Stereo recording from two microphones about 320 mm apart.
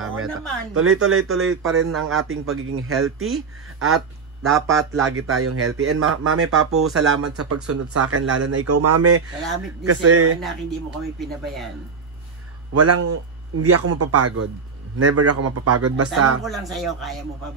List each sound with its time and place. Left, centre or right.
0.0 s a sound: right
0.7 s speech: right
11.1 s speech: centre
12.7 s speech: right
16.4 s speech: centre